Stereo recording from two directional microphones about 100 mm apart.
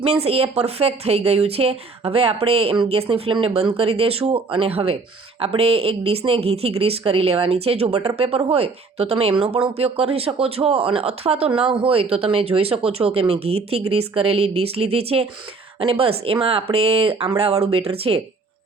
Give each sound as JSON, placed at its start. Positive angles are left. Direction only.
{"t": 0.0, "sound": "a woman's voice", "side_deg": -90}
{"t": 2.9, "sound": "speech", "side_deg": -65}
{"t": 3.4, "sound": "speech", "side_deg": -75}
{"t": 9.4, "sound": "speech", "side_deg": -75}
{"t": 11.6, "sound": "speech", "side_deg": -70}
{"t": 17.3, "sound": "speech", "side_deg": -90}